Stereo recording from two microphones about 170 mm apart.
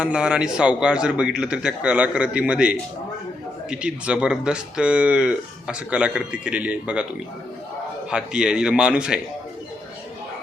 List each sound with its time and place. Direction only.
0.0 s speech: 5° right (ahead or behind)
8.1 s speech: 5° right (ahead or behind)